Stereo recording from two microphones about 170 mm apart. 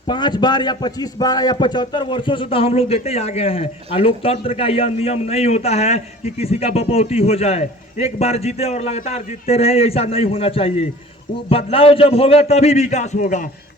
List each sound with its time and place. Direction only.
0.1 s a man's voice: 25° left (ahead or behind); by 13.4 s 45° left (ahead or behind)